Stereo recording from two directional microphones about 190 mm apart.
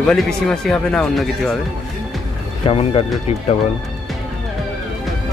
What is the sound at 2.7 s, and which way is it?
Speech, 30° left (ahead or behind).